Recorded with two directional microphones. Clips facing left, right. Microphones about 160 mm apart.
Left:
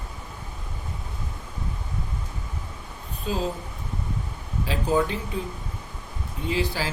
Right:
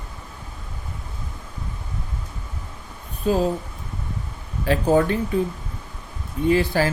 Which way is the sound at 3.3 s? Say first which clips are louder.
Right 8 dB; 50° right (ahead or behind).